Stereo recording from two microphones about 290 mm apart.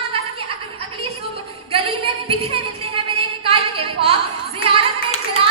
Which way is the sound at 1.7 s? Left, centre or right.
Centre.